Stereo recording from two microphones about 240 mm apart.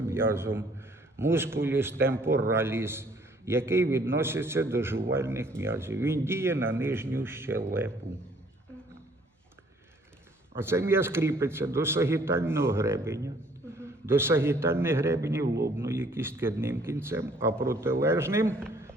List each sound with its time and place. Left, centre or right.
0.1 s a man's voice: centre
10.6 s a man's voice: centre
15.4 s speech: right
15.8 s a man's voice: centre
18.7 s a sound: centre